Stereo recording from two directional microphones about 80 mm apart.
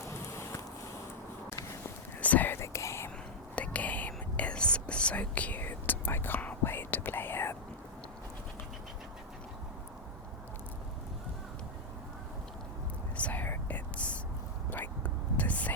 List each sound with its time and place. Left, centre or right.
0.1 s a sound: left
2.2 s whispering: left
2.6 s whispering: left
3.5 s whispering: centre
13.1 s whispering: centre